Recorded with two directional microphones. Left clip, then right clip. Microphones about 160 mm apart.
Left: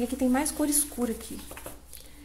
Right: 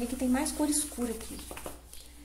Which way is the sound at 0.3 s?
30° left (ahead or behind).